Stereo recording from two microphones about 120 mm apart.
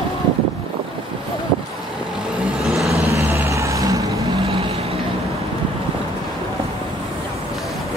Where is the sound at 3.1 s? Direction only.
25° right (ahead or behind).